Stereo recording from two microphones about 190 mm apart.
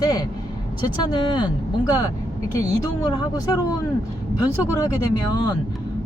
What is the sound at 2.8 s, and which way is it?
Speech, 20° left (ahead or behind).